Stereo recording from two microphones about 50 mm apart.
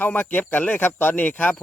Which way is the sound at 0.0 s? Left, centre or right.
Left.